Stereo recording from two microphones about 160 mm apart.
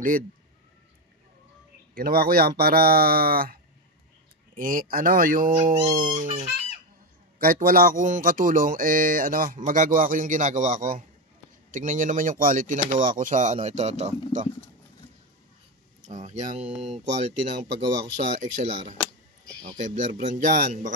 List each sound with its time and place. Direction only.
2.0 s speech: 65° right (ahead or behind)
4.6 s speech: 60° right (ahead or behind)
7.3 s speech: 60° right (ahead or behind); by 14.5 s 45° right (ahead or behind)
16.0 s speech: 45° right (ahead or behind)